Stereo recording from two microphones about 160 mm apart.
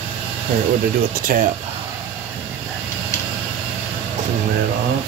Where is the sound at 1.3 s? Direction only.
60° right (ahead or behind).